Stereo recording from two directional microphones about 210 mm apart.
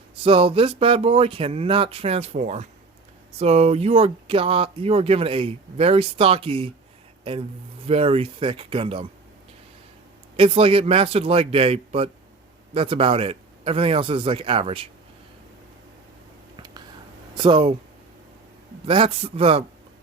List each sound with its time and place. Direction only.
0.2 s speech: 25° right (ahead or behind)
7.9 s speech: 25° right (ahead or behind)
10.3 s speech: 25° right (ahead or behind)
16.6 s a sound: 20° right (ahead or behind)
17.3 s speech: 20° right (ahead or behind)
18.9 s speech: 25° right (ahead or behind)